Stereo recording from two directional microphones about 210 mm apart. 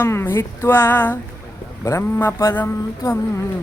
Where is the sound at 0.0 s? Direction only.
10° left (ahead or behind).